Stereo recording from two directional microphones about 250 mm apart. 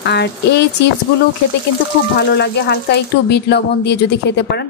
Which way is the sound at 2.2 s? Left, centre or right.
Left.